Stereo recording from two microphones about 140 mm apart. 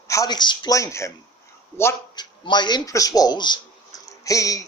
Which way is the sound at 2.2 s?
30° left (ahead or behind).